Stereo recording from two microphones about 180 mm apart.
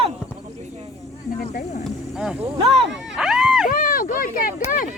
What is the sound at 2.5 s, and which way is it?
Speech, 35° right (ahead or behind).